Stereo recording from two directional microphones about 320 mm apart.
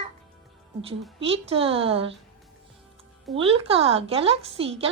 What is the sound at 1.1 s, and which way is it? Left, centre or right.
Speech, centre.